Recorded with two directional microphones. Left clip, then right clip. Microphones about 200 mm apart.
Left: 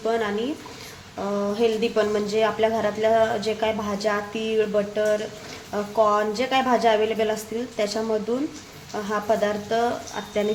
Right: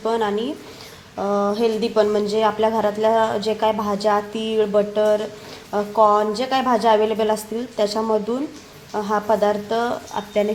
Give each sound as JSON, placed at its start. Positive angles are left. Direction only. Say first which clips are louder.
{"t": 0.0, "sound": "speech", "louder": "right 3 dB", "side_deg": -15}